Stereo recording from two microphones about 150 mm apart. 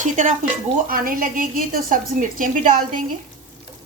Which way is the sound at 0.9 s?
70° right (ahead or behind).